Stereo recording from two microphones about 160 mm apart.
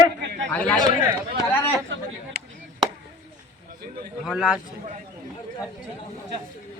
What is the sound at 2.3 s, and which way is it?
Chop, 90° right.